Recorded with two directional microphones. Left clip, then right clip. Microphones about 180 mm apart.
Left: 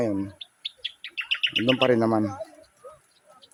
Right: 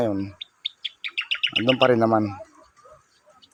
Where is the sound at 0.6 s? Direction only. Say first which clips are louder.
Right 4 dB; 65° left (ahead or behind).